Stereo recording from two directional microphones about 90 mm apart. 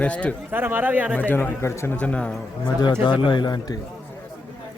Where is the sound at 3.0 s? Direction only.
60° left (ahead or behind).